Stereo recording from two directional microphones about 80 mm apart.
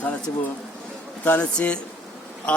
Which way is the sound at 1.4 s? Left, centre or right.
Centre.